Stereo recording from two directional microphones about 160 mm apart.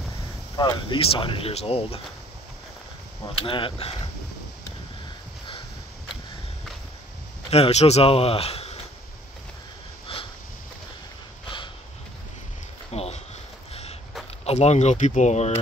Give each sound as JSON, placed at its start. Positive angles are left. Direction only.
{"t": 0.6, "sound": "speech", "side_deg": 30}
{"t": 3.3, "sound": "speech", "side_deg": 35}
{"t": 7.5, "sound": "speech", "side_deg": 40}
{"t": 10.1, "sound": "sniff", "side_deg": 35}
{"t": 11.4, "sound": "a sound", "side_deg": 30}
{"t": 12.9, "sound": "a sound", "side_deg": 40}
{"t": 14.4, "sound": "speech", "side_deg": 40}